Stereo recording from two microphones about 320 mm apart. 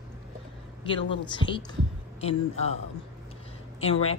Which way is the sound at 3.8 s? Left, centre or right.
Centre.